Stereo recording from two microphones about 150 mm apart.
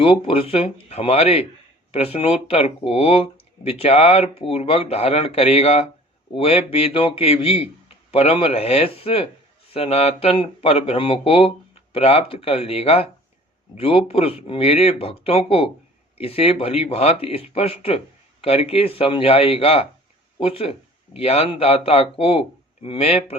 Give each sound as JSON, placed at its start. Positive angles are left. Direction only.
{"t": 0.0, "sound": "speech", "side_deg": 40}